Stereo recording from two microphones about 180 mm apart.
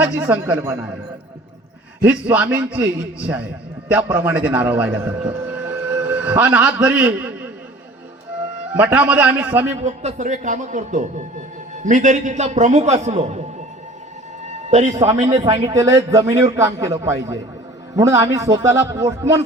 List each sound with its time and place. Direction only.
0.0 s a man's voice: 10° right (ahead or behind)
2.0 s a man's voice: 10° right (ahead or behind)
3.9 s a man's voice: 10° right (ahead or behind)
8.8 s a man's voice: 10° right (ahead or behind)
9.8 s a man's voice: 40° right (ahead or behind)
14.4 s a sound: 40° right (ahead or behind)
15.2 s a man's voice: 20° right (ahead or behind)